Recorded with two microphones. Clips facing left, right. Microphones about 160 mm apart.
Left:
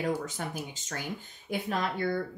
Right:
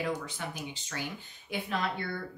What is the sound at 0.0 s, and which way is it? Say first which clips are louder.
A woman's voice: left 3 dB; 45° left (ahead or behind).